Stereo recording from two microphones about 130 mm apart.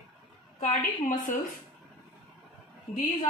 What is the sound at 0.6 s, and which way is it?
Speech, 75° left (ahead or behind).